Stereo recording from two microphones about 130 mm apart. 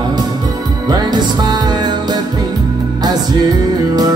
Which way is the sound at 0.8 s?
35° right (ahead or behind).